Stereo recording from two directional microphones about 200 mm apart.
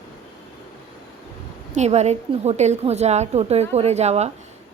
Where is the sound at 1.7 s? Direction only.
35° right (ahead or behind).